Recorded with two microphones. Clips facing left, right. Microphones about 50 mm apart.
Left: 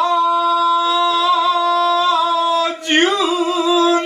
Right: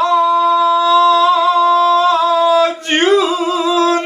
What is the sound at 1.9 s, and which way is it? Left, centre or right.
Singing, right.